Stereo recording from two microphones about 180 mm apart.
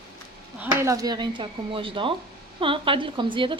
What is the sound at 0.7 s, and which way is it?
Speech, 20° right (ahead or behind).